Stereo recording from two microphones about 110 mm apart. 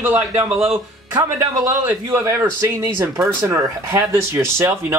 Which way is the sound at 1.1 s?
30° right (ahead or behind).